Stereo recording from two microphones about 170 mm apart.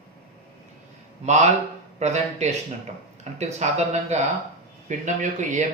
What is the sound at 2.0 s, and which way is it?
A man's voice, 40° right (ahead or behind).